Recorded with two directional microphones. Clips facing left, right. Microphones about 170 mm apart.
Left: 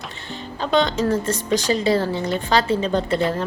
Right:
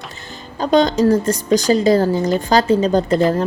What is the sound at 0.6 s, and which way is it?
A woman's voice, 40° right (ahead or behind).